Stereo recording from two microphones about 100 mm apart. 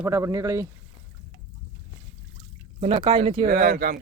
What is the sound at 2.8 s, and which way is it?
Speech, 90° right.